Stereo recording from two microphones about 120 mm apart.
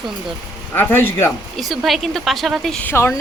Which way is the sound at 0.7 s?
15° left (ahead or behind).